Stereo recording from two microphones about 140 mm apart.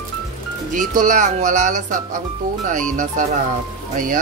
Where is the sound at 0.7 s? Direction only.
65° right (ahead or behind).